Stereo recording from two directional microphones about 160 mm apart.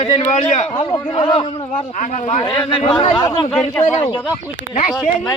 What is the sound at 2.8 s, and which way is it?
Speech, 35° left (ahead or behind).